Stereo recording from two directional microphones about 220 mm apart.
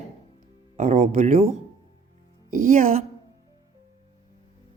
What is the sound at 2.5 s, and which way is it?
Speech, 35° right (ahead or behind).